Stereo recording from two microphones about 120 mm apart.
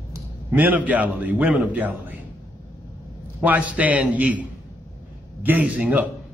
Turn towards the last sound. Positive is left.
turn(degrees=-10)  # may be behind; listen again after turning